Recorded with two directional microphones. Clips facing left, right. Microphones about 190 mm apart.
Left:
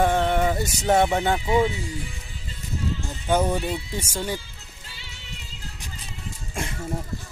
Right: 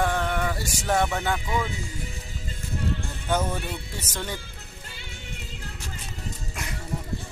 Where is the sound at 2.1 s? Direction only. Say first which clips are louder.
Right 2 dB; 55° right (ahead or behind).